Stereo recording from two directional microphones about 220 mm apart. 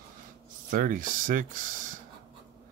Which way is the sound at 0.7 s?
40° right (ahead or behind).